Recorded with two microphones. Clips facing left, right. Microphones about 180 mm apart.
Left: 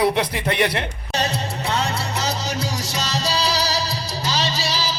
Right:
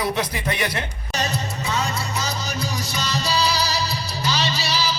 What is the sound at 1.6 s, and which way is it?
Music, 65° left (ahead or behind).